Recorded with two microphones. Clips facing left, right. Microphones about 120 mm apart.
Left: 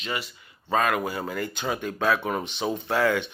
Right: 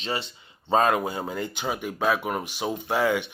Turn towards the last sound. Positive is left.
turn(degrees=-15)  # may be behind; listen again after turning